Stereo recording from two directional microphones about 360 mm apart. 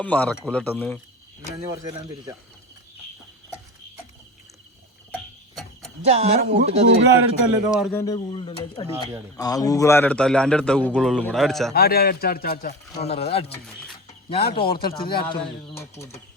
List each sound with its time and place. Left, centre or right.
0.0 s a man's voice: centre
1.7 s speech: centre
5.1 s a sound: centre
6.1 s speech: centre
7.5 s a man's voice: centre
11.7 s speech: left; by 16.2 s centre